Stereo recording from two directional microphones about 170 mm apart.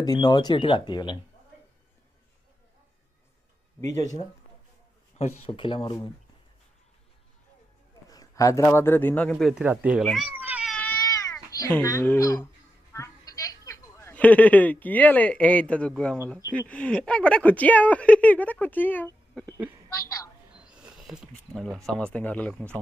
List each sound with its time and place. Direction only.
0.0 s speech: 25° left (ahead or behind)
5.1 s speech: 35° left (ahead or behind)
8.1 s speech: 20° left (ahead or behind); by 10.0 s 10° right (ahead or behind)
10.0 s cat: 5° right (ahead or behind)
10.7 s cat: 5° left (ahead or behind)
11.5 s a woman's voice: 20° left (ahead or behind)
20.5 s a sound: 5° right (ahead or behind)
21.8 s speech: 5° left (ahead or behind)